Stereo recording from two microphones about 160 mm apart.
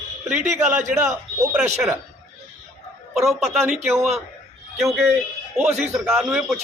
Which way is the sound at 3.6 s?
15° right (ahead or behind).